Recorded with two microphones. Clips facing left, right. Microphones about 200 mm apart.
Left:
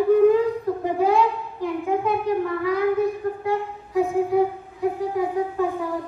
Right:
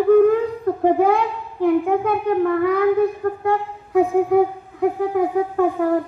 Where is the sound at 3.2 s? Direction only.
55° right (ahead or behind).